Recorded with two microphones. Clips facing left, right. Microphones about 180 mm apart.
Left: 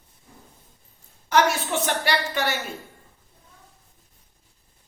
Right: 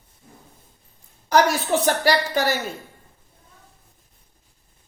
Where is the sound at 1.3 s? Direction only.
40° right (ahead or behind).